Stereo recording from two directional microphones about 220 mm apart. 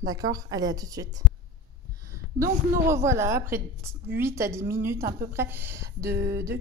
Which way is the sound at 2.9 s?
15° right (ahead or behind).